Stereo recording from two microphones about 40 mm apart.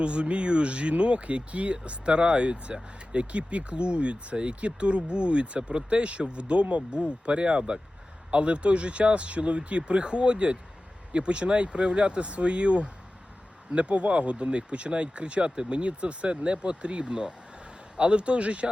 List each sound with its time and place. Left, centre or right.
0.0 s speech: right